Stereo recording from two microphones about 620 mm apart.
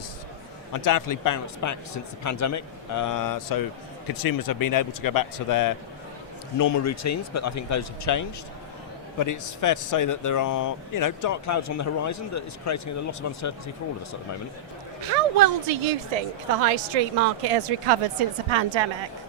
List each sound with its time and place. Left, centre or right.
0.7 s a man's voice: left
15.1 s a woman's voice: right